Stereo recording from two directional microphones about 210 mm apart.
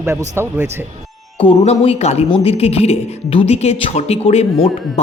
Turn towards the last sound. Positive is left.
turn(degrees=30)  # may be behind; listen again after turning